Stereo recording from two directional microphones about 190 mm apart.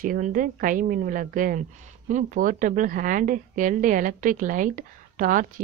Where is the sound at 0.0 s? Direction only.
45° right (ahead or behind).